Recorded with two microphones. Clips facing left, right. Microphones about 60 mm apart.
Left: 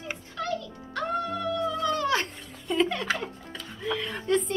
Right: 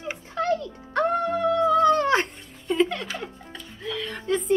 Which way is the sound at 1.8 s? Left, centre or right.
Right.